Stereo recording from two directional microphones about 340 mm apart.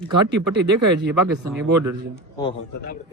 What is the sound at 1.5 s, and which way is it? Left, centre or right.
Speech, centre.